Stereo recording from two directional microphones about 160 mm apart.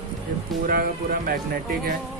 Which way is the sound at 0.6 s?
65° right (ahead or behind).